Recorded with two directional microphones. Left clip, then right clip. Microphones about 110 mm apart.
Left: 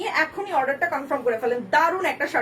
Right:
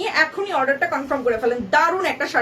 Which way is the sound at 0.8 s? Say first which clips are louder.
Right 3 dB; 20° right (ahead or behind).